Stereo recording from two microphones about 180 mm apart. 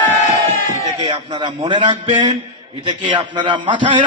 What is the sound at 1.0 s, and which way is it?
A man's voice, 25° right (ahead or behind).